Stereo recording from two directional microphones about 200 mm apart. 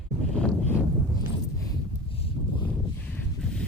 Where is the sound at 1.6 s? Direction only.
25° left (ahead or behind).